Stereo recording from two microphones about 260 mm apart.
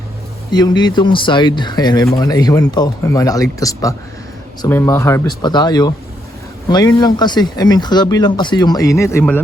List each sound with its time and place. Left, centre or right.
0.5 s speech: centre